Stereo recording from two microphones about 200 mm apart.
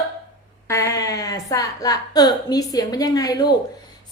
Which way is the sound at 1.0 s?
15° left (ahead or behind).